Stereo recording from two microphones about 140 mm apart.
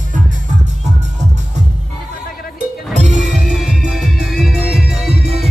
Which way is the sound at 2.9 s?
55° right (ahead or behind).